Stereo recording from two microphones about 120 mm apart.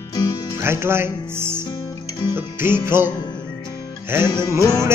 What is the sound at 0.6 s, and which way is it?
Speech, 20° right (ahead or behind).